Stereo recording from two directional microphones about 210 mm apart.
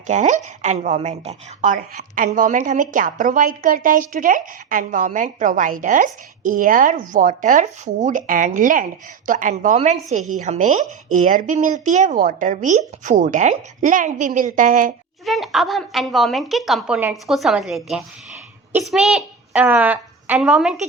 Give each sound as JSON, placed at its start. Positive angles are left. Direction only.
{"t": 0.1, "sound": "a woman's voice", "side_deg": -35}
{"t": 15.2, "sound": "a woman's voice", "side_deg": 0}